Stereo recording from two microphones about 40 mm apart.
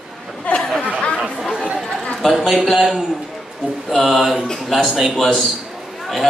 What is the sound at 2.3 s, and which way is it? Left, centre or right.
Speech, centre.